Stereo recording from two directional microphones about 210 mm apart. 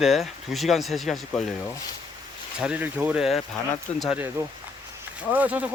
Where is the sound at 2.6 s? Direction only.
5° right (ahead or behind).